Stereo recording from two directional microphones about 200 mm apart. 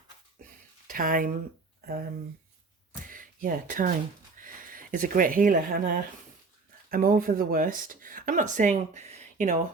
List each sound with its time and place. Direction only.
0.9 s speech: 45° right (ahead or behind)
2.9 s a sound: 45° right (ahead or behind)
4.4 s speech: 45° right (ahead or behind)